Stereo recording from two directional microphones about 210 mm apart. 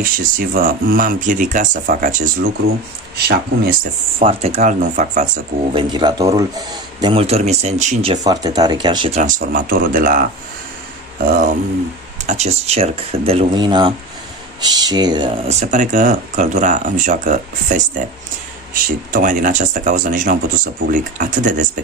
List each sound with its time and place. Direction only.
0.0 s speech: 40° right (ahead or behind)
3.2 s speech: 50° right (ahead or behind)
4.2 s speech: 30° right (ahead or behind)
5.8 s speech: 20° right (ahead or behind)
9.1 s speech: 40° right (ahead or behind)
11.2 s speech: 40° right (ahead or behind)